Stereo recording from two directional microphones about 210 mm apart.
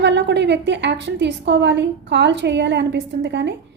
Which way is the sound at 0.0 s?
55° right (ahead or behind).